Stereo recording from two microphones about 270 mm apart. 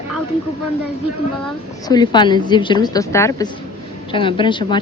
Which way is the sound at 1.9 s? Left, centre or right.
Centre.